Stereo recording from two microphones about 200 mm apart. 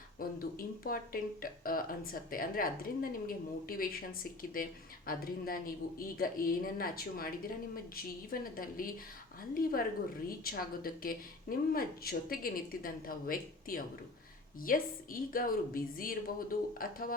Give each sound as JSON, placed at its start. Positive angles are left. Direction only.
{"t": 0.2, "sound": "speech", "side_deg": 45}
{"t": 10.2, "sound": "speech", "side_deg": 45}